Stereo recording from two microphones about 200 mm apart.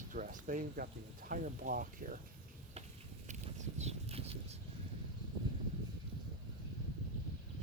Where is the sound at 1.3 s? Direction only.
45° right (ahead or behind).